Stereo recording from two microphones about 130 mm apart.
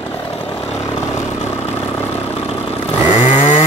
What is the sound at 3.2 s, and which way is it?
Chainsaw, 70° left (ahead or behind).